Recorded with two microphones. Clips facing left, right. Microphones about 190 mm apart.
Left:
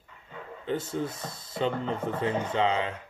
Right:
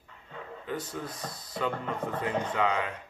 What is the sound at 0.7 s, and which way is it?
Speech, 25° left (ahead or behind).